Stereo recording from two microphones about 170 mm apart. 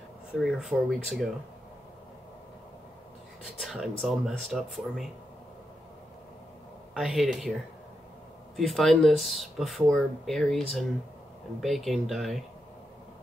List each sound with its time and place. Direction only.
0.4 s speech: centre (ahead or behind)
3.5 s speech: centre (ahead or behind)
6.9 s speech: centre (ahead or behind)
8.5 s speech: centre (ahead or behind)